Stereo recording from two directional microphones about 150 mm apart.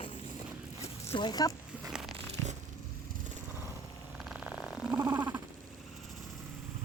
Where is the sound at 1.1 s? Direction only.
25° left (ahead or behind).